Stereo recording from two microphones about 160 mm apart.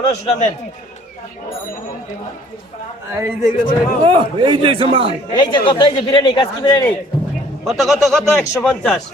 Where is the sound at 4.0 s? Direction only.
30° right (ahead or behind).